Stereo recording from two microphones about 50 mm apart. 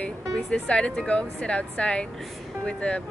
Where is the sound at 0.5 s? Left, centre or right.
Centre.